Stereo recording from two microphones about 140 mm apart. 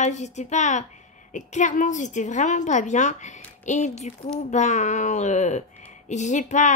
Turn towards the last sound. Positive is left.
turn(degrees=60)  # may be behind; listen again after turning